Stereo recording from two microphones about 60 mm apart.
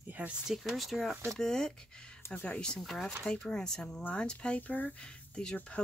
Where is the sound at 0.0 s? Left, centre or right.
Right.